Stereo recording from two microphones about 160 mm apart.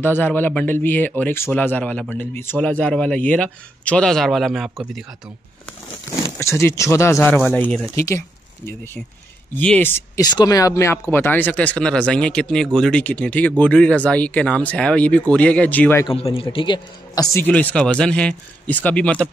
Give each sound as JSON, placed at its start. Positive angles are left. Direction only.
{"t": 0.0, "sound": "speech", "side_deg": 10}
{"t": 6.4, "sound": "speech", "side_deg": 15}
{"t": 9.6, "sound": "speech", "side_deg": 10}
{"t": 10.2, "sound": "speech", "side_deg": 25}
{"t": 16.1, "sound": "speech", "side_deg": 35}